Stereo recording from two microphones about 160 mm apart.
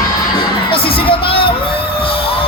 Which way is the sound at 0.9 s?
35° left (ahead or behind).